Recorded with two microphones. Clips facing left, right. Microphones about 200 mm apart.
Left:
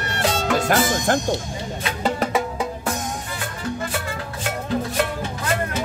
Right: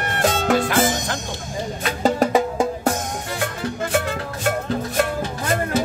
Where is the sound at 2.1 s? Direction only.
45° right (ahead or behind).